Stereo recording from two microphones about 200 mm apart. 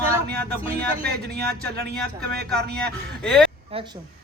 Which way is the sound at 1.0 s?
55° right (ahead or behind).